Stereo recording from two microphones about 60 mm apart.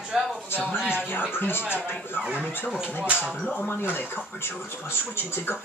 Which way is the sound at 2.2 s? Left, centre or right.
Right.